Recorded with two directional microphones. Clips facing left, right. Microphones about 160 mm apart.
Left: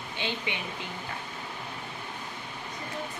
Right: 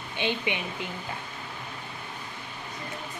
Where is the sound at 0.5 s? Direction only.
15° right (ahead or behind).